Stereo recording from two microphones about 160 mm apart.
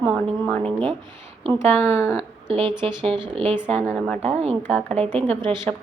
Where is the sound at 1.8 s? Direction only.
15° left (ahead or behind).